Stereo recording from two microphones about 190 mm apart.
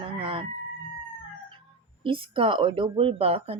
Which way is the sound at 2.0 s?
30° right (ahead or behind).